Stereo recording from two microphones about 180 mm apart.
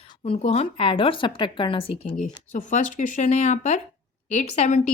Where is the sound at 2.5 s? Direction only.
45° left (ahead or behind).